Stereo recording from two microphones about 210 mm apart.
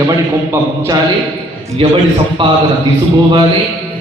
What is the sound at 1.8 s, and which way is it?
Speech, 25° right (ahead or behind).